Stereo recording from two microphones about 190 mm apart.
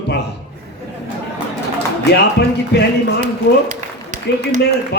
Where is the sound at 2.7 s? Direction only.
60° left (ahead or behind).